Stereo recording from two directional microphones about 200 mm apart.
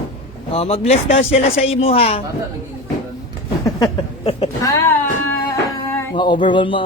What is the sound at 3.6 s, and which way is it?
Speech, 20° left (ahead or behind).